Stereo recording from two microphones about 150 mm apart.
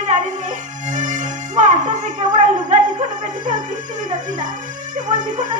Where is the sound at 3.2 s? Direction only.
55° right (ahead or behind).